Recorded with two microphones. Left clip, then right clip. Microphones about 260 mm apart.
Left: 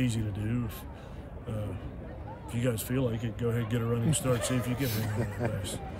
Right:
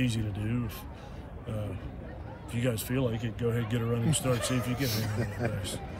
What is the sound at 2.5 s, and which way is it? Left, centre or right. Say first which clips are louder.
A man's voice: even; centre.